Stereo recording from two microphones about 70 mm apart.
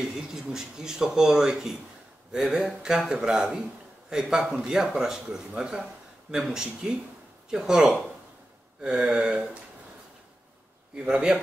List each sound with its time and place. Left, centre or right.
0.0 s speech: centre
11.0 s speech: centre